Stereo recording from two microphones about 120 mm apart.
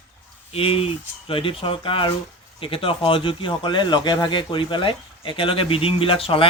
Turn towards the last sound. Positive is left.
turn(degrees=50)  # may be behind; listen again after turning